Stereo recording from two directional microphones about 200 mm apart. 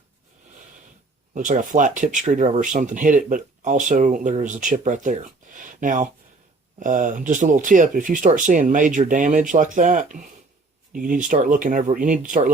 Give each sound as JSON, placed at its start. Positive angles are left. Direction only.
{"t": 1.3, "sound": "speech", "side_deg": -40}